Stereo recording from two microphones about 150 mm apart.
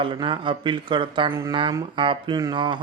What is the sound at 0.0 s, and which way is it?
Speech, 35° right (ahead or behind).